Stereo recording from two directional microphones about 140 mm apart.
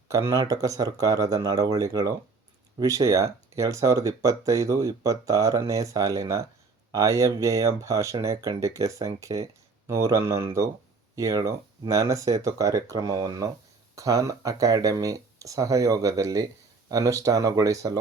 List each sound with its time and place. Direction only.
0.1 s speech: 20° right (ahead or behind)